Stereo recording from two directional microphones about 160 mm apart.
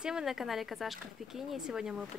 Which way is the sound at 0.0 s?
5° right (ahead or behind).